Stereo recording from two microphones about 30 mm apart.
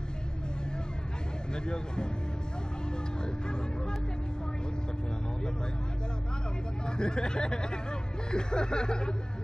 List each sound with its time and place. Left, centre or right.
1.5 s snicker: left
7.0 s snicker: left